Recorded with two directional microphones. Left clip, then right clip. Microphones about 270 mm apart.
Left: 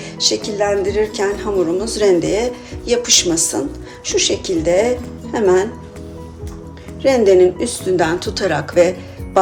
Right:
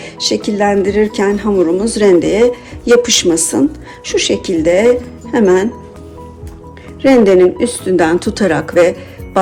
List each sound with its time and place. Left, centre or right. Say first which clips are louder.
0.0 s speech: right 2 dB; right
7.0 s speech: right 3 dB; right